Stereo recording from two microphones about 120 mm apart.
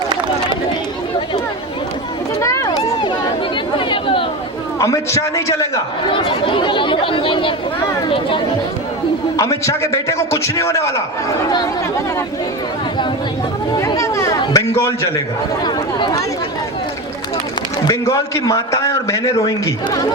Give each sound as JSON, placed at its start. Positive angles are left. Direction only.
{"t": 2.4, "sound": "a sound", "side_deg": 25}
{"t": 3.8, "sound": "chatter", "side_deg": 45}
{"t": 4.8, "sound": "a man's voice", "side_deg": 25}
{"t": 6.1, "sound": "speech", "side_deg": 45}
{"t": 9.4, "sound": "a man's voice", "side_deg": 25}
{"t": 13.7, "sound": "a man's voice", "side_deg": 25}
{"t": 15.6, "sound": "speech", "side_deg": 35}
{"t": 17.8, "sound": "a man's voice", "side_deg": 25}